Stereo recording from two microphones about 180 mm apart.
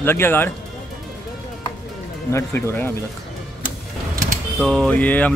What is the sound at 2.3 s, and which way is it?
Speech, 15° left (ahead or behind).